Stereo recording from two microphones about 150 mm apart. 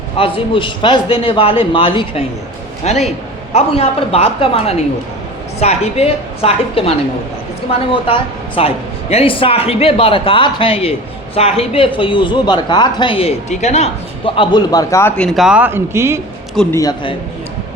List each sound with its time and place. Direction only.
0.2 s a woman's voice: 35° left (ahead or behind)
14.7 s speech: 20° left (ahead or behind)
15.1 s speech: 5° left (ahead or behind); by 16.2 s 15° right (ahead or behind)
16.6 s a man's voice: 5° left (ahead or behind)